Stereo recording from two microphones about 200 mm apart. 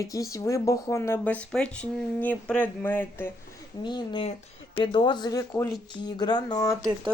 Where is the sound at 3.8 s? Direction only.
20° left (ahead or behind).